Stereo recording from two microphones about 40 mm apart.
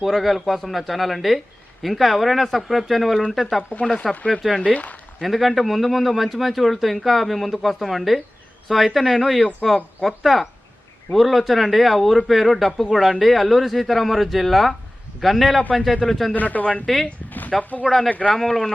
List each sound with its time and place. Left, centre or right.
0.0 s a man's voice: centre
4.6 s speech: left
5.2 s a man's voice: centre
16.3 s a man's voice: left
16.8 s a man's voice: centre
17.6 s speech: left